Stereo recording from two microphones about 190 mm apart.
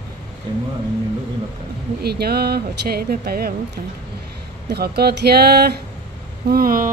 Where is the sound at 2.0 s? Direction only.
55° right (ahead or behind).